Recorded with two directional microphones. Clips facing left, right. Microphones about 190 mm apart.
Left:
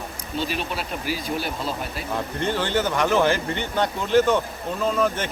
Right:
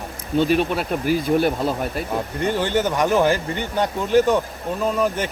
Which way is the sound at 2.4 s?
15° right (ahead or behind).